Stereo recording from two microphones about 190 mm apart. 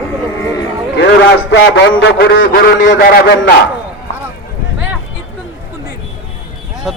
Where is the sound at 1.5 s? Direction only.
65° left (ahead or behind).